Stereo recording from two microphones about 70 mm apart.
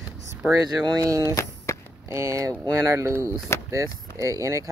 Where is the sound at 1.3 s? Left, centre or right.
Left.